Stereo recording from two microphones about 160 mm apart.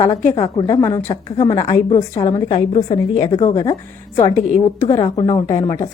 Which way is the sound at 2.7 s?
40° left (ahead or behind).